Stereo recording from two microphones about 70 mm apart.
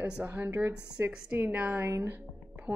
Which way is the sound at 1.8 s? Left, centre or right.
Right.